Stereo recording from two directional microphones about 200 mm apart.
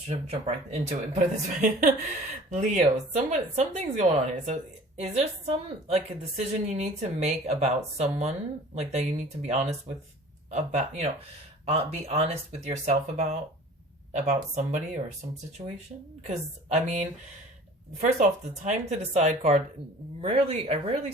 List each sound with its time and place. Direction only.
0.1 s a woman's voice: 30° right (ahead or behind)
16.2 s a woman's voice: 35° right (ahead or behind)